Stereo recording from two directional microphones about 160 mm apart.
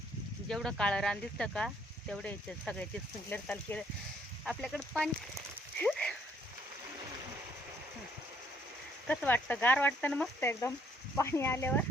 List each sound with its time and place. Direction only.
0.4 s speech: 5° left (ahead or behind)
5.7 s horse: 5° left (ahead or behind)
9.0 s speech: 10° left (ahead or behind)